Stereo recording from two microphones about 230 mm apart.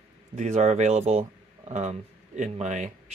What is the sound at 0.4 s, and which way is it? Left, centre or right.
Speech, right.